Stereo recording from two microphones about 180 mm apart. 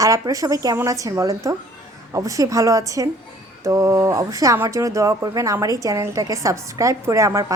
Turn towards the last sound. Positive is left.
turn(degrees=-15)  # may be behind; listen again after turning